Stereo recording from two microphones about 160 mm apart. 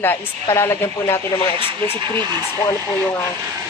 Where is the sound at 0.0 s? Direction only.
15° left (ahead or behind).